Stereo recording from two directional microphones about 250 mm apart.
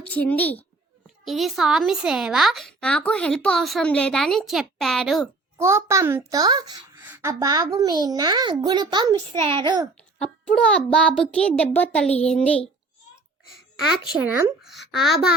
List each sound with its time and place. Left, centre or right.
0.0 s a child's voice: centre
5.5 s a child's voice: centre
10.2 s a child's voice: centre
13.8 s speech: centre